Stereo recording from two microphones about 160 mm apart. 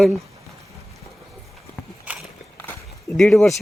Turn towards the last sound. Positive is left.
turn(degrees=0)  # may be behind; listen again after turning